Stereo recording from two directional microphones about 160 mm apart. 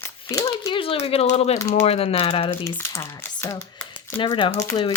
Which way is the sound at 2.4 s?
15° left (ahead or behind).